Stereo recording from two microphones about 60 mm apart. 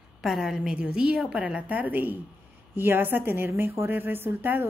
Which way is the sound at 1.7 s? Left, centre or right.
Right.